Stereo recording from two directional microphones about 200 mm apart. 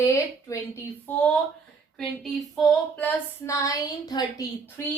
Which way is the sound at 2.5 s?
Centre (ahead or behind).